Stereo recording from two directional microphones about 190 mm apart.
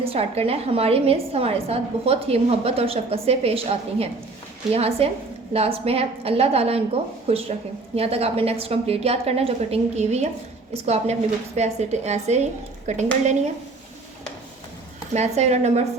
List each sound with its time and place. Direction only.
0.0 s a woman's voice: 30° right (ahead or behind)
15.1 s a woman's voice: 35° right (ahead or behind)